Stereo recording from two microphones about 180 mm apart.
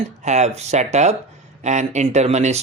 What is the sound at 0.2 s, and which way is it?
Speech, 40° right (ahead or behind).